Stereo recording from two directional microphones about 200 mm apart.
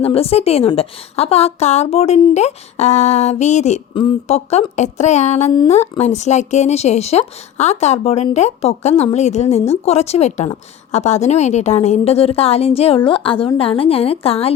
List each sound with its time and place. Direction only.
0.0 s a woman's voice: 30° left (ahead or behind)